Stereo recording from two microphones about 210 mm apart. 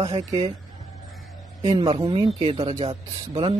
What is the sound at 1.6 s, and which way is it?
Speech, 25° right (ahead or behind).